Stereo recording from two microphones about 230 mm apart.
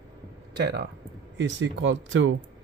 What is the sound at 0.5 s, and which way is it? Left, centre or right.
Speech, right.